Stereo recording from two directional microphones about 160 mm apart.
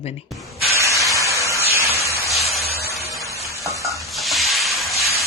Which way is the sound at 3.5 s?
20° right (ahead or behind).